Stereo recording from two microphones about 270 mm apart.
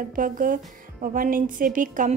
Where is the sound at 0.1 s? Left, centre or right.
Right.